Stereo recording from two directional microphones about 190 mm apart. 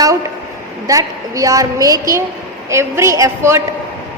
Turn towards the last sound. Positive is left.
turn(degrees=-15)  # may be behind; listen again after turning